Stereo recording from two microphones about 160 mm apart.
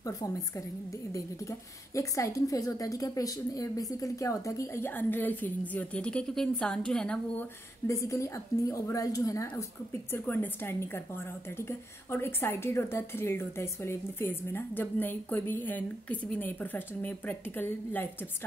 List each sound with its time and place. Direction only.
0.0 s a woman's voice: 20° left (ahead or behind)
2.0 s a woman's voice: 20° left (ahead or behind)